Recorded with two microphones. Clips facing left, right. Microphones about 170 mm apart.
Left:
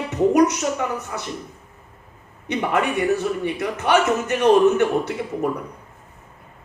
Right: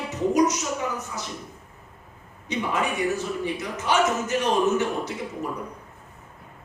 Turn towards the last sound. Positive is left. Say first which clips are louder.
# left 6 dB
turn(degrees=60)  # may be behind; listen again after turning